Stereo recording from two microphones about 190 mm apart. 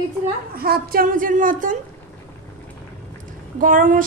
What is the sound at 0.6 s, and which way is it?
A woman's voice, 50° right (ahead or behind).